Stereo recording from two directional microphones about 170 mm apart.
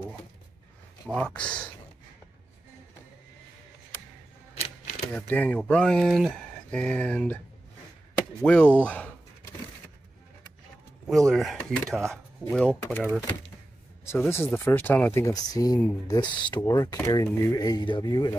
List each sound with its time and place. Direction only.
1.0 s speech: 5° left (ahead or behind)
5.1 s speech: 10° left (ahead or behind)
8.4 s speech: 10° left (ahead or behind)
11.1 s speech: centre (ahead or behind)
14.0 s speech: 15° left (ahead or behind)